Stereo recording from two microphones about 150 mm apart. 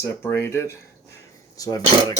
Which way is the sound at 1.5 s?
25° left (ahead or behind).